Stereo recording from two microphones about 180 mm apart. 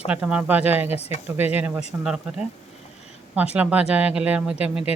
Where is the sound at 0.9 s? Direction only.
35° left (ahead or behind).